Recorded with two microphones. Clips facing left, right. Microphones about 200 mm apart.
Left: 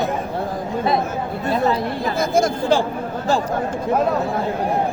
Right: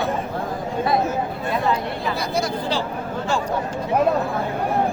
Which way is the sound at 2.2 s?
50° left (ahead or behind).